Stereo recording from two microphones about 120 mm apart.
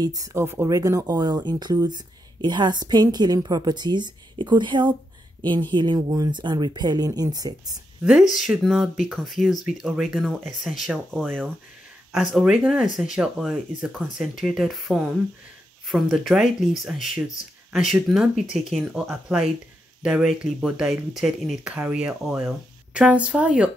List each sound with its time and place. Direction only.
0.0 s speech: 30° right (ahead or behind)
8.0 s speech: 5° right (ahead or behind)